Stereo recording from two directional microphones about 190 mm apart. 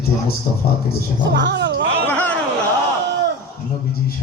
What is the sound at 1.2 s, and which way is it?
Speech, 70° right (ahead or behind).